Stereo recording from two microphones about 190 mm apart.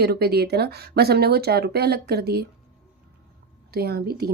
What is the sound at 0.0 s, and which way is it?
Speech, 55° right (ahead or behind).